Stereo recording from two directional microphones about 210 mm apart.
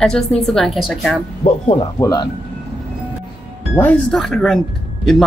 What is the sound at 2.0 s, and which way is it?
Speech, 15° left (ahead or behind).